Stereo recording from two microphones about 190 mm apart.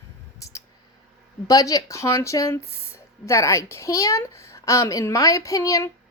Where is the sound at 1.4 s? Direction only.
20° left (ahead or behind).